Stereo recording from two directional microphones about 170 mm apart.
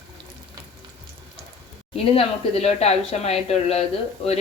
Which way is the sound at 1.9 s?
35° left (ahead or behind).